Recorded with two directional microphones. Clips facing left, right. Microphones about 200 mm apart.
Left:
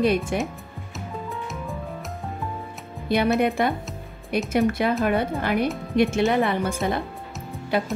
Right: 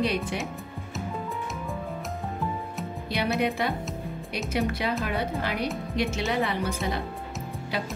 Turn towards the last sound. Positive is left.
turn(degrees=50)  # may be behind; listen again after turning